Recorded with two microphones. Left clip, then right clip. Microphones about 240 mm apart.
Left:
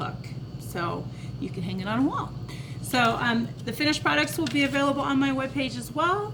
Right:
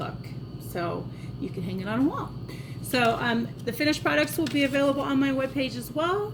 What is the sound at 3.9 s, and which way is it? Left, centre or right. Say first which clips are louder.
Speech: even; centre.